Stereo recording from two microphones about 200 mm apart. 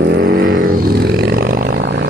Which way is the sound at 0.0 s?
55° right (ahead or behind).